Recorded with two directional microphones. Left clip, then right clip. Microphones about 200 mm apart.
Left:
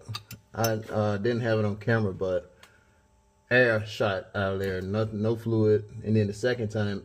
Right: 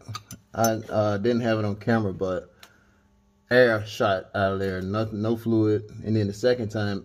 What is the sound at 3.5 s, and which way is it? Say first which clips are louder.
Speech: right 3 dB; 60° right (ahead or behind).